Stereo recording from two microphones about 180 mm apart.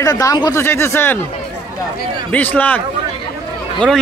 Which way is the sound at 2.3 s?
10° left (ahead or behind).